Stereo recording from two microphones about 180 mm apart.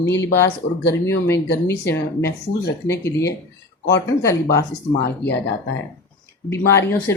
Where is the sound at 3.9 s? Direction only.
15° left (ahead or behind).